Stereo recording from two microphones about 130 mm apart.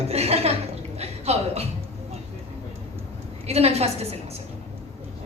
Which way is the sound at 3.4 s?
55° right (ahead or behind).